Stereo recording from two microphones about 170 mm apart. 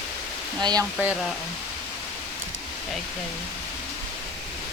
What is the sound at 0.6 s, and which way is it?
Speech, 25° right (ahead or behind).